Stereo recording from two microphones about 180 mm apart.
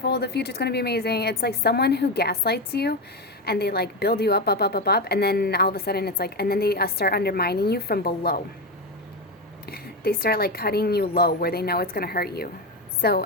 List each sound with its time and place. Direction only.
0.0 s a woman's voice: 65° left (ahead or behind)
9.6 s a woman's voice: 60° left (ahead or behind)